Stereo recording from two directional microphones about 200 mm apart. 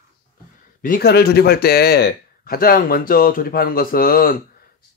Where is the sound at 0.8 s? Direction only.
50° left (ahead or behind).